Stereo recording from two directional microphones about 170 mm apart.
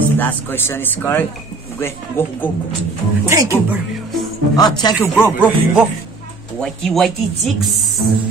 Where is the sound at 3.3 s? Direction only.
15° right (ahead or behind).